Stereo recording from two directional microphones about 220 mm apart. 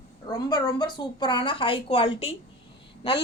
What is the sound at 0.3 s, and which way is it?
A woman's voice, 15° left (ahead or behind).